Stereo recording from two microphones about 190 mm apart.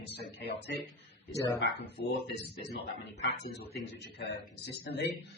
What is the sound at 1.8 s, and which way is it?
A man's voice, 60° left (ahead or behind).